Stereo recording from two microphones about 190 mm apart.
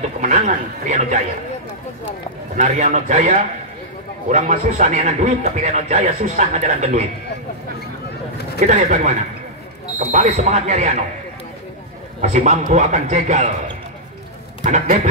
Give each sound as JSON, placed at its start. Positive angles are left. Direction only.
{"t": 0.8, "sound": "a man's voice", "side_deg": -40}
{"t": 2.5, "sound": "a man's voice", "side_deg": -40}
{"t": 8.5, "sound": "a man's voice", "side_deg": -35}
{"t": 12.2, "sound": "a man's voice", "side_deg": -40}
{"t": 14.6, "sound": "a man's voice", "side_deg": -40}